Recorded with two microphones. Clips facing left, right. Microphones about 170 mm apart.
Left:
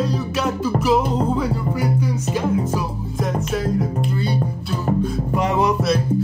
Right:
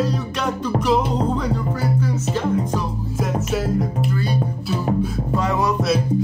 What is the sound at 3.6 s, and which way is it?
Music, 5° right (ahead or behind).